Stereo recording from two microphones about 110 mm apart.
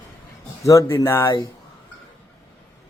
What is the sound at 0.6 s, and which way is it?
Speech, 30° left (ahead or behind).